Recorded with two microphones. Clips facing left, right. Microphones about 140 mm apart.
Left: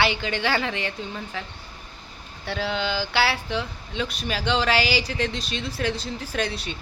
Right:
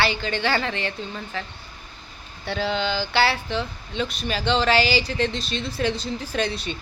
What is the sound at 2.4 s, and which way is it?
Speech, 5° left (ahead or behind).